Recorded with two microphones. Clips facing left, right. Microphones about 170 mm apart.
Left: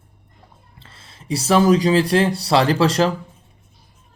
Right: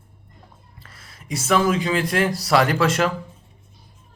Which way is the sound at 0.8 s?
25° left (ahead or behind).